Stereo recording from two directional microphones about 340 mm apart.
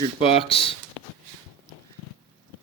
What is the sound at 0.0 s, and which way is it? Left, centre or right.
Speech, centre.